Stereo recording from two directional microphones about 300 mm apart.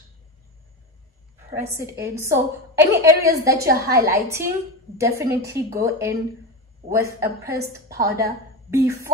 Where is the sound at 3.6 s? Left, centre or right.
Right.